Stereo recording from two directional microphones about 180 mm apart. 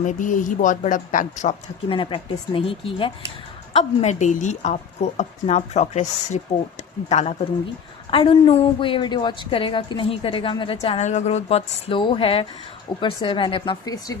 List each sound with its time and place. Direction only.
0.0 s speech: 45° left (ahead or behind)
1.9 s a woman's voice: 30° left (ahead or behind)